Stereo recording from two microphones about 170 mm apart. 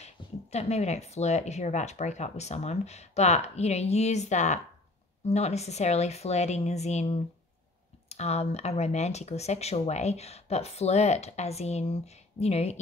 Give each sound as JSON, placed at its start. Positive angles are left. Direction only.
{"t": 0.0, "sound": "speech", "side_deg": 40}